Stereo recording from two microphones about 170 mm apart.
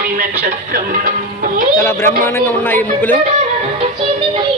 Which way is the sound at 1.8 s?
15° left (ahead or behind).